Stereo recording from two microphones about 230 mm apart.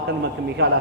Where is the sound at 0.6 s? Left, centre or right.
Right.